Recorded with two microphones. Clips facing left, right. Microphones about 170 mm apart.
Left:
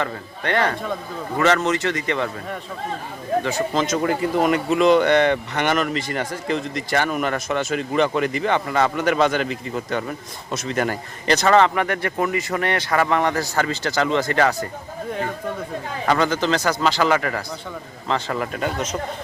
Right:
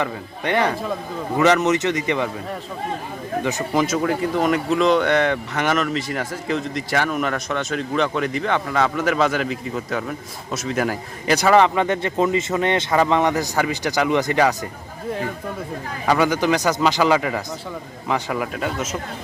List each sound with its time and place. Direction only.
0.0 s a man's voice: 15° right (ahead or behind)
0.7 s speech: 5° right (ahead or behind)
1.4 s a man's voice: 20° right (ahead or behind)
3.4 s a man's voice: 10° right (ahead or behind)
3.9 s speech: centre (ahead or behind); by 14.7 s 15° right (ahead or behind)
16.0 s a man's voice: 10° right (ahead or behind)